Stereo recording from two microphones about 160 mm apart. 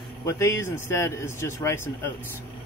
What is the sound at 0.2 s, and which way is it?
A man's voice, 20° left (ahead or behind).